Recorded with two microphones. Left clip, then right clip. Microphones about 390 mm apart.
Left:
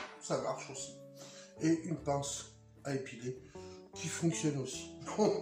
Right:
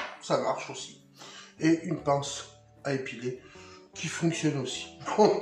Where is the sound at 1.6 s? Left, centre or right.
Right.